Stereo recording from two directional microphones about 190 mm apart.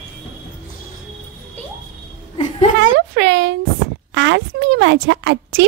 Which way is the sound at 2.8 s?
65° right (ahead or behind).